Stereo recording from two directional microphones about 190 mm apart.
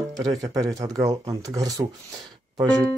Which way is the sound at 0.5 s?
15° right (ahead or behind).